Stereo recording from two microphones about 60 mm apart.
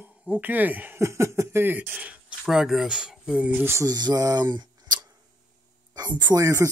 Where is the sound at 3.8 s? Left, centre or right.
Right.